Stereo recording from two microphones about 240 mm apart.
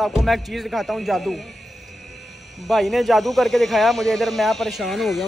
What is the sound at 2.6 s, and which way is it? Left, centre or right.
Speech, centre.